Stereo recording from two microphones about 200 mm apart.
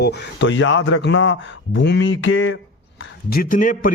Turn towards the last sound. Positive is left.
turn(degrees=40)  # may be behind; listen again after turning